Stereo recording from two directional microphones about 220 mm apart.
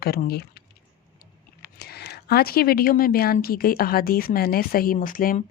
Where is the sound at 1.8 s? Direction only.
45° left (ahead or behind).